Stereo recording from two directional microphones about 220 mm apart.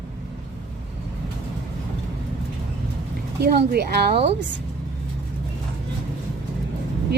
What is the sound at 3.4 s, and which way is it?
Speech, 45° right (ahead or behind).